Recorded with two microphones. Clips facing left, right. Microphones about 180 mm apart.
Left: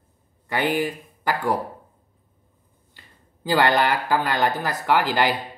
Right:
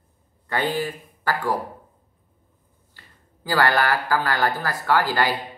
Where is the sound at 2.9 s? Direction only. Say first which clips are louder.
Even; 20° left (ahead or behind).